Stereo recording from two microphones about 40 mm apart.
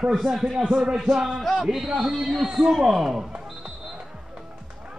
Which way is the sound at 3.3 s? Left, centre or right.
Centre.